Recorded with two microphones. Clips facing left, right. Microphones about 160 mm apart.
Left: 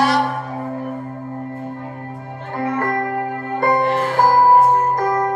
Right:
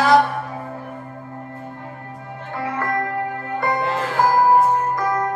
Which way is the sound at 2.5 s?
45° left (ahead or behind).